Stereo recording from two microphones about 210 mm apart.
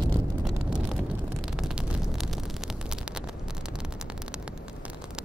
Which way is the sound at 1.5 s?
5° right (ahead or behind).